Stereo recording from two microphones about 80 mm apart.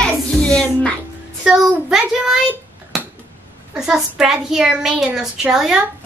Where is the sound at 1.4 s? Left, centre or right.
Centre.